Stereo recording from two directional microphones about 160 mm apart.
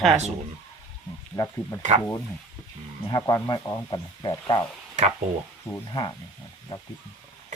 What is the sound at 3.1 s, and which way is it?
Speech, 20° left (ahead or behind).